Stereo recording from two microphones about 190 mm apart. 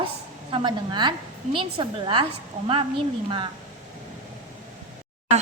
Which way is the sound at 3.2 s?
25° right (ahead or behind).